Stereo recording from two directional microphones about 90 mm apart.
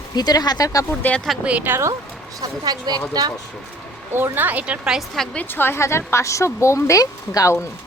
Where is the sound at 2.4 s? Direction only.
50° right (ahead or behind).